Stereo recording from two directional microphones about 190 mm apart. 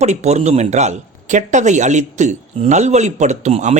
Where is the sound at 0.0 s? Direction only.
35° right (ahead or behind).